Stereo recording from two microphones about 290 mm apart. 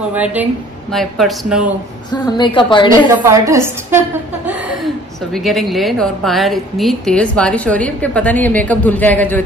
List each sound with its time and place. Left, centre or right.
0.1 s a woman's voice: centre
2.0 s a woman's voice: centre
3.2 s a woman's voice: centre